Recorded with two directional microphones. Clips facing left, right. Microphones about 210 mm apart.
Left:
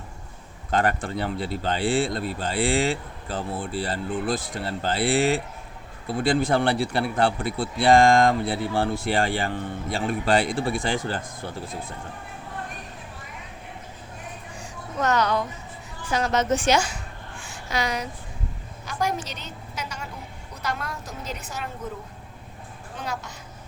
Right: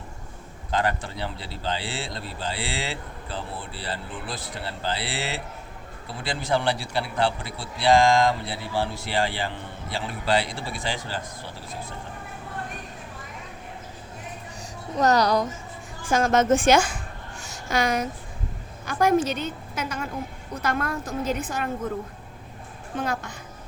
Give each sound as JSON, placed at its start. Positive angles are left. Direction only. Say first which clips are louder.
{"t": 0.7, "sound": "a man's voice", "louder": "left 2 dB", "side_deg": 50}
{"t": 14.9, "sound": "a woman's voice", "louder": "right 3 dB", "side_deg": -35}
{"t": 23.0, "sound": "a woman's voice", "louder": "right 5 dB", "side_deg": -50}